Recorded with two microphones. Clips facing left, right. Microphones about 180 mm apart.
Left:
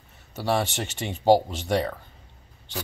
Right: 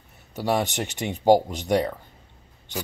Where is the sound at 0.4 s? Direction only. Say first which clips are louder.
Right 1 dB; 15° right (ahead or behind).